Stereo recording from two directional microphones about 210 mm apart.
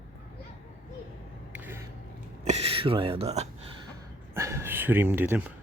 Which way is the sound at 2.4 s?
30° right (ahead or behind).